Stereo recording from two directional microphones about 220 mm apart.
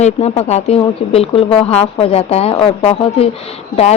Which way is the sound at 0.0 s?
30° left (ahead or behind).